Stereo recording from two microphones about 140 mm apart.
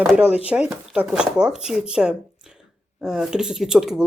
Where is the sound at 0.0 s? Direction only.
5° right (ahead or behind).